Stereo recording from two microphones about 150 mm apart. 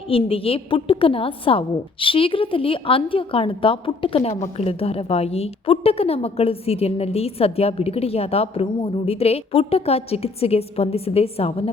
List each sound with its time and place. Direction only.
0.1 s a woman's voice: 40° left (ahead or behind)